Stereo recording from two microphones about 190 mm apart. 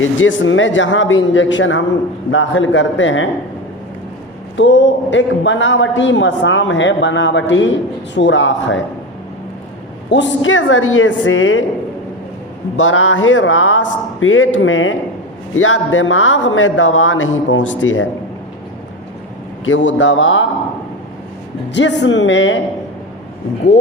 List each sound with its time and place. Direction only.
0.0 s a man's voice: 90° left
2.3 s a man's voice: 90° left
4.6 s a man's voice: 75° left (ahead or behind)
10.1 s a man's voice: 80° left
12.7 s a man's voice: 90° left
19.6 s a man's voice: 85° left
21.7 s a man's voice: 70° left (ahead or behind)